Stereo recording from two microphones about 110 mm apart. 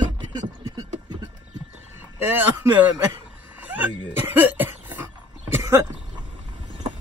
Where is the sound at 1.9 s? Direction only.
20° right (ahead or behind).